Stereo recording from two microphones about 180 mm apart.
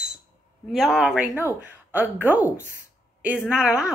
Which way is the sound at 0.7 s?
Centre (ahead or behind).